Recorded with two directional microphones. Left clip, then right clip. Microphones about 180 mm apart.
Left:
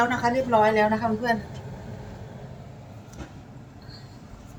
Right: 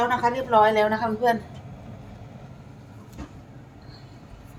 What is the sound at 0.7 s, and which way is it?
Speech, 50° right (ahead or behind).